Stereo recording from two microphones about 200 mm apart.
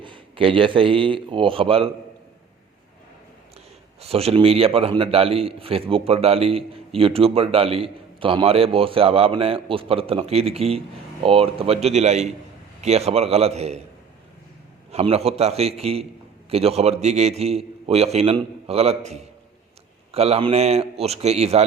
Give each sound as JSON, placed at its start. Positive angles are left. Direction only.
{"t": 0.0, "sound": "a man's voice", "side_deg": -25}
{"t": 4.0, "sound": "a man's voice", "side_deg": -30}
{"t": 14.9, "sound": "a man's voice", "side_deg": -30}